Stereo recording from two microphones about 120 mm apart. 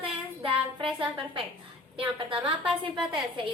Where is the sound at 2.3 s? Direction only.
45° right (ahead or behind).